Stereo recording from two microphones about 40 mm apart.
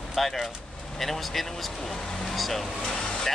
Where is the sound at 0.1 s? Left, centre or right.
Centre.